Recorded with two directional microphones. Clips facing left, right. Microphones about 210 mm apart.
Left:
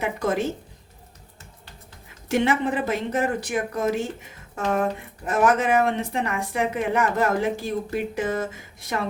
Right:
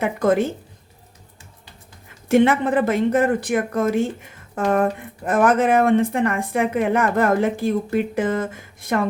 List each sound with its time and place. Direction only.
0.0 s speech: 55° right (ahead or behind)
2.3 s speech: 55° right (ahead or behind)